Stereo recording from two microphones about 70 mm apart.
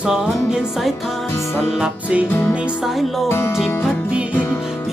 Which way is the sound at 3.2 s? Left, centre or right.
Left.